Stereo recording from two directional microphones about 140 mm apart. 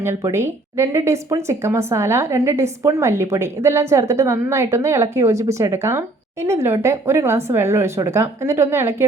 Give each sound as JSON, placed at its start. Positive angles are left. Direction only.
{"t": 0.0, "sound": "speech", "side_deg": -20}